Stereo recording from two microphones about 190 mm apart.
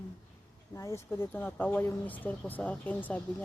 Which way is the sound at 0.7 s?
15° left (ahead or behind).